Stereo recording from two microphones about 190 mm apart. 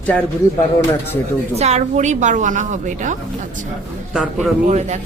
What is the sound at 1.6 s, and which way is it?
A woman's voice, 35° right (ahead or behind).